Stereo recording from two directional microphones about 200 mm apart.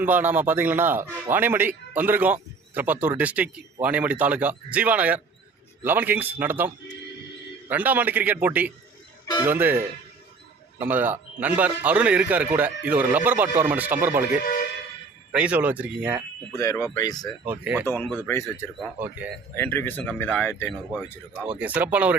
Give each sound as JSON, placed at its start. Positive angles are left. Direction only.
{"t": 0.0, "sound": "speech", "side_deg": -10}
{"t": 15.3, "sound": "speech", "side_deg": -5}
{"t": 16.6, "sound": "speech", "side_deg": 15}
{"t": 17.4, "sound": "speech", "side_deg": -10}
{"t": 18.3, "sound": "speech", "side_deg": 10}
{"t": 18.8, "sound": "speech", "side_deg": -10}
{"t": 19.5, "sound": "speech", "side_deg": 10}
{"t": 21.4, "sound": "speech", "side_deg": -5}